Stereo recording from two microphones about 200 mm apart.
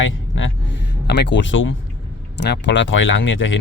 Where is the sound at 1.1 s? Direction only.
60° left (ahead or behind).